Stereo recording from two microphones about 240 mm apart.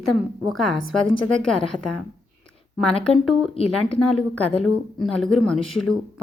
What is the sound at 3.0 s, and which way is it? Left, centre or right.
A woman's voice, centre.